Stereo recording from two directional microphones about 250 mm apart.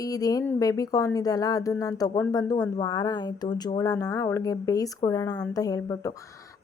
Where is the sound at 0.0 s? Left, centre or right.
Centre.